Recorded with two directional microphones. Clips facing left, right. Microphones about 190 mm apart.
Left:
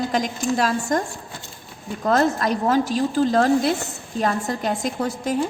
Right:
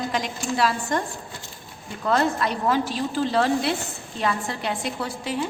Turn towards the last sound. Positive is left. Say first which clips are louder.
# left 5 dB
turn(degrees=45)  # may be behind; listen again after turning